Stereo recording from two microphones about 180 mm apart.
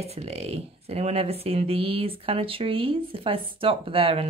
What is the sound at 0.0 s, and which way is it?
Speech, 35° right (ahead or behind).